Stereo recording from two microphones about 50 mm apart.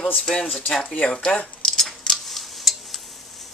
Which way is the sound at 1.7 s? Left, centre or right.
Centre.